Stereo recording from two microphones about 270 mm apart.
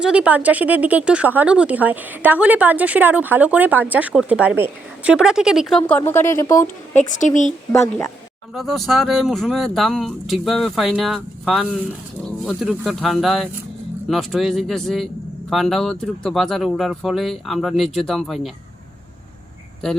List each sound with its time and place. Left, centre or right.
0.0 s a man's voice: centre
6.9 s speech: left
7.7 s a man's voice: centre